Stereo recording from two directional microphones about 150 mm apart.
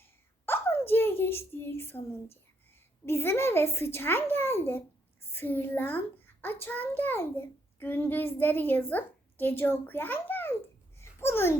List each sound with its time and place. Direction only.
0.0 s a sound: 15° left (ahead or behind)
3.1 s a child's voice: 15° left (ahead or behind)
11.0 s babbling: 15° left (ahead or behind)